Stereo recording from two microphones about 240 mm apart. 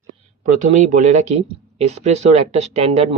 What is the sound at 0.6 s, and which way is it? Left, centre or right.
Speech, right.